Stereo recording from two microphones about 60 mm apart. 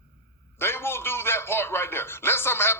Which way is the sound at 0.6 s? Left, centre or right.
Left.